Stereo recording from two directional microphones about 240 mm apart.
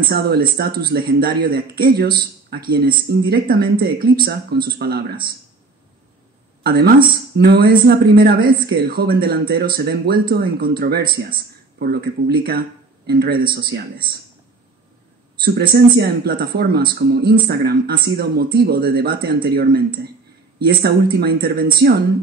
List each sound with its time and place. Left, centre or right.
0.1 s speech: right
6.6 s speech: right
15.7 s speech: right